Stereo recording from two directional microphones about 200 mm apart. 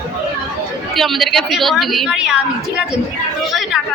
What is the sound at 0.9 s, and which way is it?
A woman's voice, centre (ahead or behind).